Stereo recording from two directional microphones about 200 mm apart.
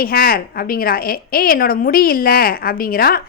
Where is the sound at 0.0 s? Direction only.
45° left (ahead or behind).